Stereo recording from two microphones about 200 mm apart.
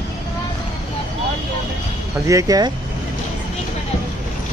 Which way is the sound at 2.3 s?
15° right (ahead or behind).